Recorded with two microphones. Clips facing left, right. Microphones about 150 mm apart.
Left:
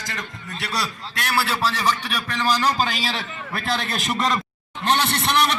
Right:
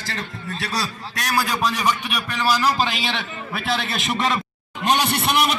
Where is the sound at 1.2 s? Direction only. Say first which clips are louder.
Right 1 dB; 20° right (ahead or behind).